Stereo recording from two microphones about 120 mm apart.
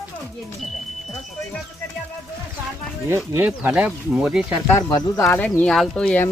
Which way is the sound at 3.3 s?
15° right (ahead or behind).